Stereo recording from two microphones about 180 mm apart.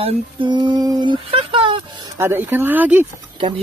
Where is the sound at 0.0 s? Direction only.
25° right (ahead or behind).